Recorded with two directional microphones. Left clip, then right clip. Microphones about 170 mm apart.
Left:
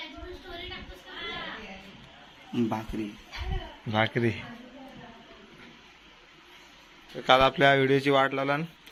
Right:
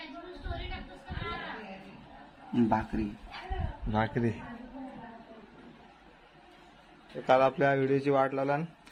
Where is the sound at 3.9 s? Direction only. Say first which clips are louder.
Left 4 dB; 5° left (ahead or behind).